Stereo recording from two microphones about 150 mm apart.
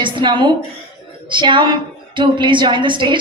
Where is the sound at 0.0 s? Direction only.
30° right (ahead or behind).